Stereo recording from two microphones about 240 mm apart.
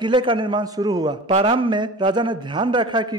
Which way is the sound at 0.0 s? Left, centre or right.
Centre.